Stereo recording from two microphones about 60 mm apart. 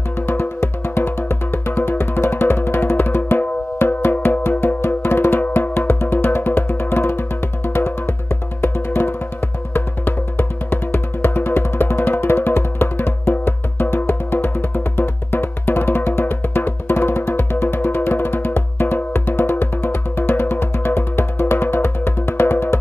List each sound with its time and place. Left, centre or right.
0.3 s music: left